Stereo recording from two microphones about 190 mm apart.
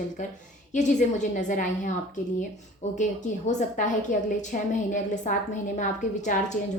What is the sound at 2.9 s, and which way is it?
A woman's voice, 40° left (ahead or behind).